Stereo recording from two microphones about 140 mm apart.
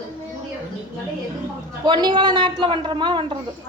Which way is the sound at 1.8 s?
30° right (ahead or behind).